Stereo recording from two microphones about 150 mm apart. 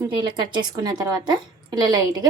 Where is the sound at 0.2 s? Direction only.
30° right (ahead or behind).